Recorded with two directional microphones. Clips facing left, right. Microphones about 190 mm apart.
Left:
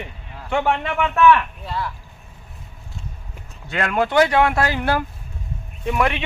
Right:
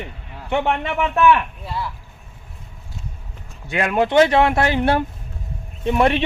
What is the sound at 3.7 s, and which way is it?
Speech, 20° right (ahead or behind).